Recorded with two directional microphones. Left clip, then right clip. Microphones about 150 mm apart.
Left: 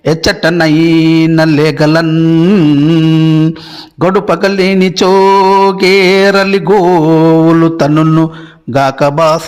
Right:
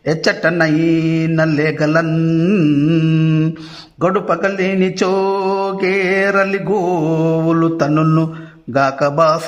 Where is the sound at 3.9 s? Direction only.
35° left (ahead or behind).